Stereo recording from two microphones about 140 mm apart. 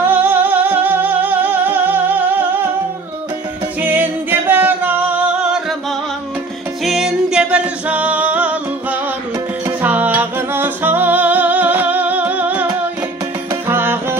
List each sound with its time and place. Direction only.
0.0 s music: 15° right (ahead or behind)
3.8 s singing: 15° right (ahead or behind)
6.8 s music: centre (ahead or behind)
13.7 s music: 15° right (ahead or behind)